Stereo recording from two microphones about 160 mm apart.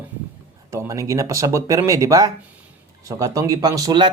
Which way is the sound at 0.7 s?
20° right (ahead or behind).